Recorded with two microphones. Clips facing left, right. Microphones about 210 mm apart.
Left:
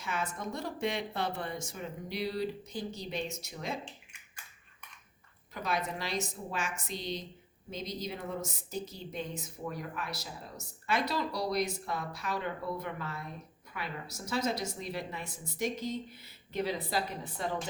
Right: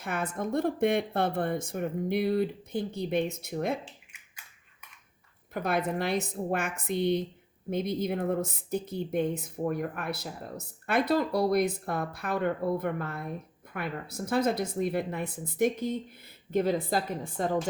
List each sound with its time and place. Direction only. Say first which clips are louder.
0.0 s a woman's voice: right 5 dB; 55° right (ahead or behind)
5.5 s a woman's voice: right 6 dB; 55° right (ahead or behind)